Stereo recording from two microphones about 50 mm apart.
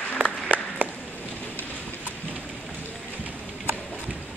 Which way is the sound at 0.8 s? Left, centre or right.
Right.